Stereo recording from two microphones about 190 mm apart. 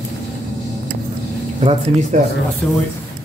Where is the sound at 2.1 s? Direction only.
40° right (ahead or behind).